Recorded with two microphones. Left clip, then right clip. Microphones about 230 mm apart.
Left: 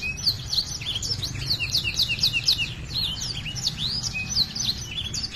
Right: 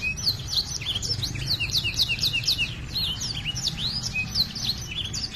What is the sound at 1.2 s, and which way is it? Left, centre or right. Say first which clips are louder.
Bird: even; centre.